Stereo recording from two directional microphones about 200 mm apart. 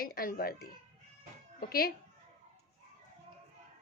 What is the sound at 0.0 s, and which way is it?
Speech, 45° left (ahead or behind).